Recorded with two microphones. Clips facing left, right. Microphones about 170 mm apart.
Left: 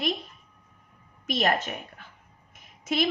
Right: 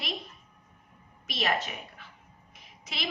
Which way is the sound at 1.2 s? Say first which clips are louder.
Left 5 dB; 45° left (ahead or behind).